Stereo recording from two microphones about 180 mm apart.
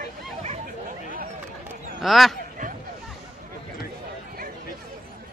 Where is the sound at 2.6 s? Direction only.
45° right (ahead or behind).